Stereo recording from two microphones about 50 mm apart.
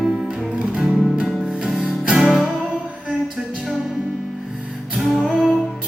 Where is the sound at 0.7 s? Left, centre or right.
Centre.